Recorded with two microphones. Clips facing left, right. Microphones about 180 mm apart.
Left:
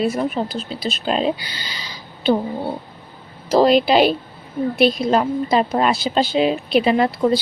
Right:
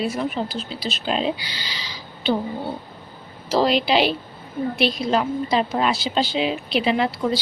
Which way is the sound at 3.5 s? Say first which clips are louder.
Left 5 dB; 45° left (ahead or behind).